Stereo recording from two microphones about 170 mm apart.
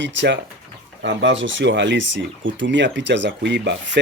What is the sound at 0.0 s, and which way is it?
Speech, 90° right.